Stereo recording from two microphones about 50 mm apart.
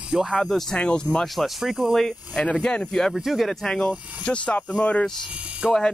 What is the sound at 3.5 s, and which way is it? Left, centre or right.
Speech, centre.